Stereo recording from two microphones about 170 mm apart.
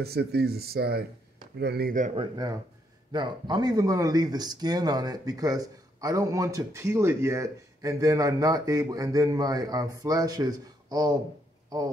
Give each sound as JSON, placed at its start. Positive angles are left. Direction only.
{"t": 0.0, "sound": "speech", "side_deg": -70}
{"t": 2.1, "sound": "speech", "side_deg": -20}